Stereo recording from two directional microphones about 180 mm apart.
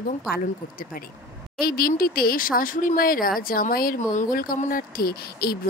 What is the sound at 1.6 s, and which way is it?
A woman's voice, 55° left (ahead or behind).